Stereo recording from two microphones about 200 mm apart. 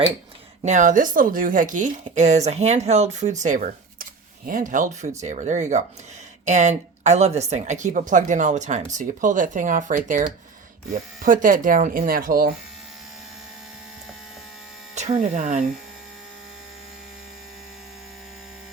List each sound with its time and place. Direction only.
0.6 s speech: 40° right (ahead or behind)
14.9 s speech: 35° right (ahead or behind)